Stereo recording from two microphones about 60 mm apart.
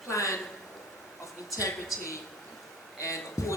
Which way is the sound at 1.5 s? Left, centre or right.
Left.